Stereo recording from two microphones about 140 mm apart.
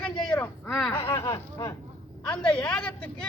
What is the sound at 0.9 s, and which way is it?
Speech, 20° left (ahead or behind).